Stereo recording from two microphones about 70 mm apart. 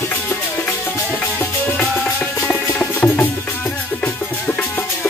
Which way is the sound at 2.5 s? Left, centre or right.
Left.